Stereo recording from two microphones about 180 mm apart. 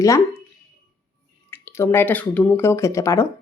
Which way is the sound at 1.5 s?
10° left (ahead or behind).